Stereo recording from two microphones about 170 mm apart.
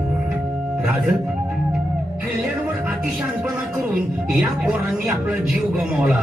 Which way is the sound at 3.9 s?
5° right (ahead or behind).